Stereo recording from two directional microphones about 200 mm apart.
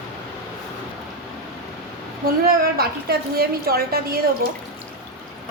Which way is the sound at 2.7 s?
50° right (ahead or behind).